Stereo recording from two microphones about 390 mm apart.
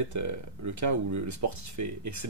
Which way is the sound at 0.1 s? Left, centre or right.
Right.